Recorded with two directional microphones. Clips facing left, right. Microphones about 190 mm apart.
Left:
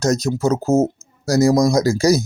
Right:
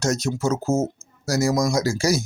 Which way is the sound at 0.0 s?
40° left (ahead or behind).